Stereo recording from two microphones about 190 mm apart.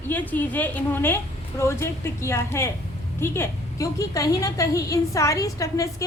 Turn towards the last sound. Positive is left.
turn(degrees=15)  # may be behind; listen again after turning